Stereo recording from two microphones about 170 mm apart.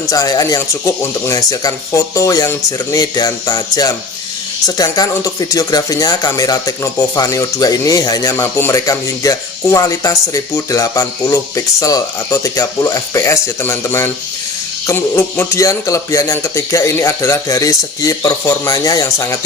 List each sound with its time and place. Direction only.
0.1 s speech: 20° left (ahead or behind)